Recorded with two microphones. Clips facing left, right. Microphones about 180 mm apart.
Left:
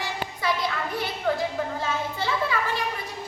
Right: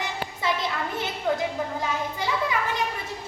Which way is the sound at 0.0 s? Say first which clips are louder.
Even; 20° right (ahead or behind).